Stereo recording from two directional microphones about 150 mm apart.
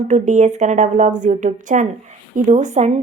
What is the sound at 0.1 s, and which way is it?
A woman's voice, 55° right (ahead or behind).